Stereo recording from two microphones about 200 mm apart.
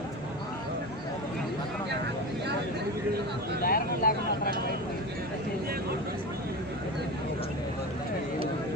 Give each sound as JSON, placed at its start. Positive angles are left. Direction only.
{"t": 3.6, "sound": "speech", "side_deg": 45}